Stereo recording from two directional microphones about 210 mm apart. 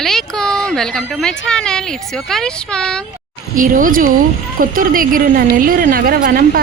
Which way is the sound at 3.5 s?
40° right (ahead or behind).